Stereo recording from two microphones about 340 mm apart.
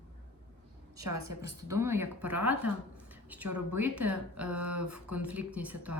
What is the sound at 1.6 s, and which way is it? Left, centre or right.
Speech, centre.